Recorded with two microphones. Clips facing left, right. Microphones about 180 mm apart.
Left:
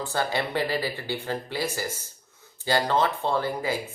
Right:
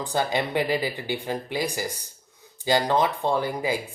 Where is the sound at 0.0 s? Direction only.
15° right (ahead or behind).